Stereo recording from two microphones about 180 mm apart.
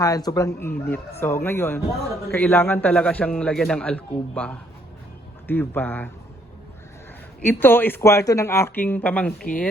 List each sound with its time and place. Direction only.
0.0 s speech: 20° left (ahead or behind)
7.4 s speech: 10° left (ahead or behind)